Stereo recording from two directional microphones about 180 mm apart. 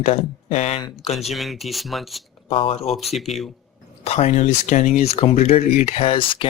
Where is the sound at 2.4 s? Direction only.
30° left (ahead or behind).